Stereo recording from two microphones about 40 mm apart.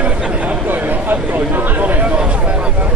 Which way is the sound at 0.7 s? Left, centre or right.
Right.